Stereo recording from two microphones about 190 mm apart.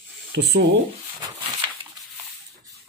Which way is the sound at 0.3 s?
55° right (ahead or behind).